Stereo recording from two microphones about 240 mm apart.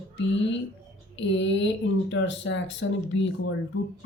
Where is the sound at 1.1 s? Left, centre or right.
Left.